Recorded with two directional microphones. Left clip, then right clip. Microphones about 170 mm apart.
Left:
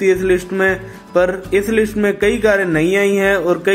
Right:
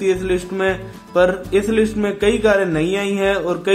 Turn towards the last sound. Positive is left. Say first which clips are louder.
# left 4 dB
turn(degrees=25)  # may be behind; listen again after turning